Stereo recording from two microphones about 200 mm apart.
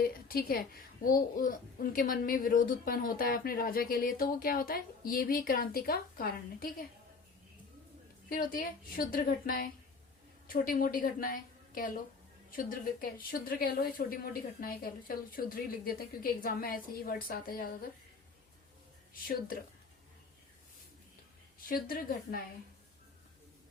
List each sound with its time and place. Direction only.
0.0 s a child's voice: 50° left (ahead or behind)
8.3 s a child's voice: 45° left (ahead or behind)
21.7 s a child's voice: 45° left (ahead or behind)